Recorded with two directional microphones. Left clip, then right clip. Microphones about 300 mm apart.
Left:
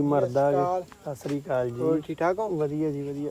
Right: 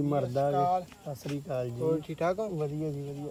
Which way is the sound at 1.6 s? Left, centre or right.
Left.